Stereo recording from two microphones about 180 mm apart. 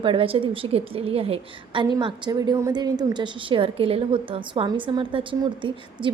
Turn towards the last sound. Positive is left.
turn(degrees=-25)  # may be behind; listen again after turning